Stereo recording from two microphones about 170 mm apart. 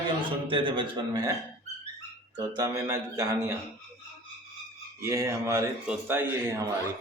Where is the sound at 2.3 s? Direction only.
20° right (ahead or behind).